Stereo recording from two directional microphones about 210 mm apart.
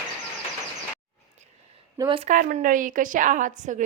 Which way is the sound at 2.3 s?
40° right (ahead or behind).